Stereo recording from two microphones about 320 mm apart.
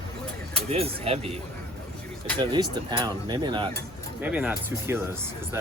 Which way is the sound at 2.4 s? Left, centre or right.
Centre.